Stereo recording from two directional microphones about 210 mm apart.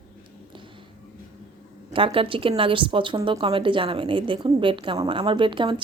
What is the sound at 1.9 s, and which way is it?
Speech, 25° right (ahead or behind).